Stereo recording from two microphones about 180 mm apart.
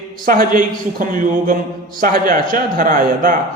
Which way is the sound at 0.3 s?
50° right (ahead or behind).